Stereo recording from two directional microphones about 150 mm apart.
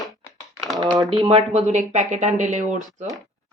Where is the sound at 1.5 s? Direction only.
50° right (ahead or behind).